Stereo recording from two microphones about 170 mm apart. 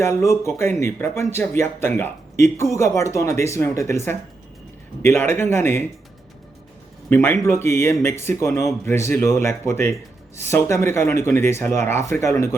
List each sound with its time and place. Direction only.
0.0 s speech: 15° left (ahead or behind)
7.1 s speech: 15° left (ahead or behind)